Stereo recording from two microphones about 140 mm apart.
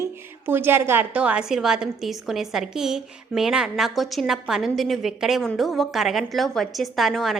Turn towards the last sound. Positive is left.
turn(degrees=0)  # may be behind; listen again after turning